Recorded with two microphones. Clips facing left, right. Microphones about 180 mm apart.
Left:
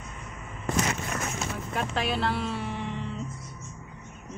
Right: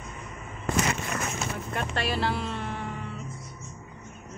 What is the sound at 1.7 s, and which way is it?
Speech, centre (ahead or behind).